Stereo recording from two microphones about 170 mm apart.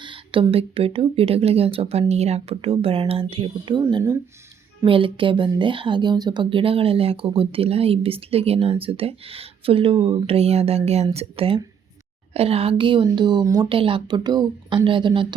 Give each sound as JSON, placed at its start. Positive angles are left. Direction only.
{"t": 0.0, "sound": "a woman's voice", "side_deg": -30}
{"t": 13.7, "sound": "a woman's voice", "side_deg": -30}